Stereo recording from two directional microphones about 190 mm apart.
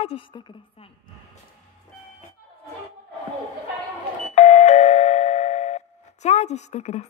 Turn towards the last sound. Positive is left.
turn(degrees=35)  # may be behind; listen again after turning